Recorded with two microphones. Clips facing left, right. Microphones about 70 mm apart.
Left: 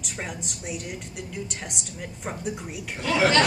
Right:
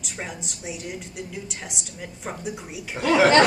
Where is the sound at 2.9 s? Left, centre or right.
Right.